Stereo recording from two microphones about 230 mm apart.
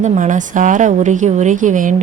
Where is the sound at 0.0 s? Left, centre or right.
Right.